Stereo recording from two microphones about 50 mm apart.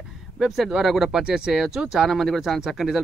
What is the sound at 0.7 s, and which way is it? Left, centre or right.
Speech, centre.